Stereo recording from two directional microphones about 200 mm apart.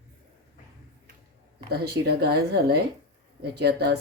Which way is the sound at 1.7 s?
55° right (ahead or behind).